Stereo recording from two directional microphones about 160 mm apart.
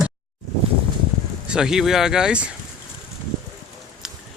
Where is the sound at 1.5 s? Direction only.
5° right (ahead or behind).